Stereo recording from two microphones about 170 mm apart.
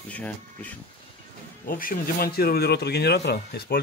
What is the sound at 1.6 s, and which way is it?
Speech, 55° left (ahead or behind).